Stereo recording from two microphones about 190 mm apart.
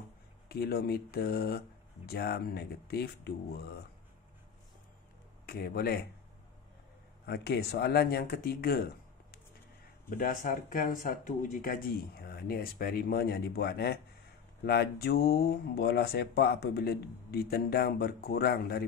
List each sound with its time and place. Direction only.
0.5 s speech: 55° left (ahead or behind)
5.5 s speech: 55° left (ahead or behind)
7.2 s speech: 55° left (ahead or behind)